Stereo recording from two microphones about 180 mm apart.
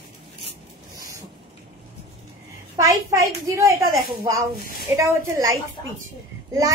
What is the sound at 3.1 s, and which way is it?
Speech, 15° right (ahead or behind).